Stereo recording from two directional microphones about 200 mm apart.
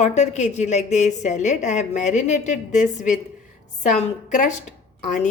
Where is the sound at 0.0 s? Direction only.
35° left (ahead or behind).